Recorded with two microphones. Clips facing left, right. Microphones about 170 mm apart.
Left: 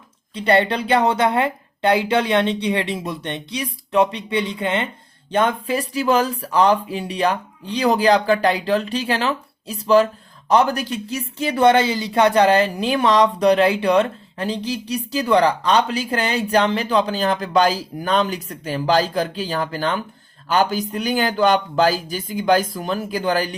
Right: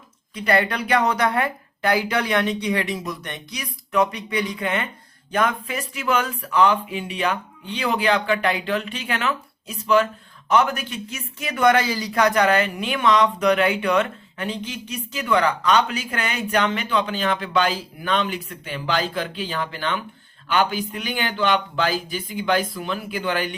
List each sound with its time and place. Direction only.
0.3 s a woman's voice: 30° left (ahead or behind)